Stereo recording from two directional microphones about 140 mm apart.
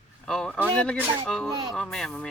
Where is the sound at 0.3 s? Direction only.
5° left (ahead or behind).